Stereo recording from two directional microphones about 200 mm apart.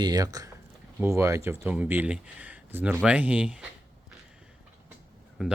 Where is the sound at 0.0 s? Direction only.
20° right (ahead or behind).